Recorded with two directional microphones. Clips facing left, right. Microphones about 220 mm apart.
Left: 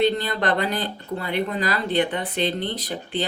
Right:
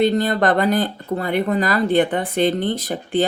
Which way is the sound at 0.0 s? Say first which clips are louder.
Right 5 dB; 50° right (ahead or behind).